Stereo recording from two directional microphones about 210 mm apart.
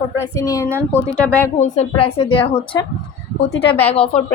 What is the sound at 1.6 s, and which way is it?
Speech, 35° left (ahead or behind).